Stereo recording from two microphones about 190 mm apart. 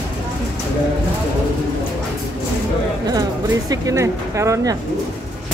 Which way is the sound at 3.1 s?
20° right (ahead or behind).